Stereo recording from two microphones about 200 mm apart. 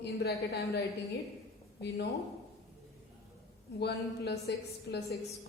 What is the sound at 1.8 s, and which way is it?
Speech, 55° left (ahead or behind).